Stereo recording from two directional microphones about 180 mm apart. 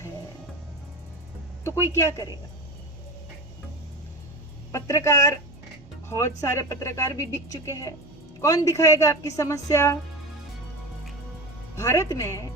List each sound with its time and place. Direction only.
1.6 s a woman's voice: 15° left (ahead or behind)
4.7 s a woman's voice: 15° left (ahead or behind)
11.8 s a woman's voice: 15° left (ahead or behind)